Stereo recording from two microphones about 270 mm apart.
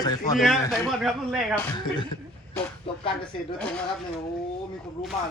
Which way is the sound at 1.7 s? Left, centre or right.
Centre.